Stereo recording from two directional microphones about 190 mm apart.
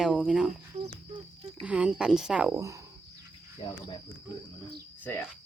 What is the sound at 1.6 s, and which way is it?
Speech, 5° right (ahead or behind).